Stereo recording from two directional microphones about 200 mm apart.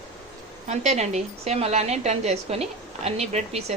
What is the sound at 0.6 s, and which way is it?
A woman's voice, 35° right (ahead or behind).